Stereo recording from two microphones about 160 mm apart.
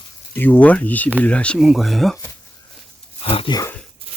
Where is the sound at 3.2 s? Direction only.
35° left (ahead or behind).